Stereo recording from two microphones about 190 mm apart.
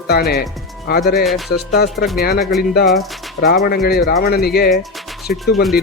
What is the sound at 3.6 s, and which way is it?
Speech, 55° left (ahead or behind).